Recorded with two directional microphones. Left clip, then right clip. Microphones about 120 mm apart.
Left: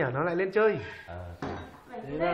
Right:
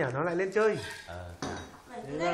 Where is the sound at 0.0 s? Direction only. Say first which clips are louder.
Left 2 dB; 10° left (ahead or behind).